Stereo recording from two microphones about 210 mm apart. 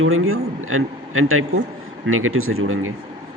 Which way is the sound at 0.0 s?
80° right.